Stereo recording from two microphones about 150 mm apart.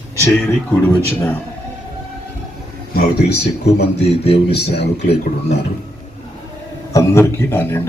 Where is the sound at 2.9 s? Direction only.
90° left.